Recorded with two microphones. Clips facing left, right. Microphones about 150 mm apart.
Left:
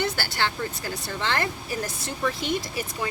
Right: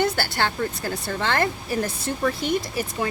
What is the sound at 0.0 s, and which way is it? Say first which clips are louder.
Speech: right 4 dB; 50° right (ahead or behind).